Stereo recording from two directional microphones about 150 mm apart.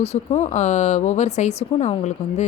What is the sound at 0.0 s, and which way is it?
Speech, 45° left (ahead or behind).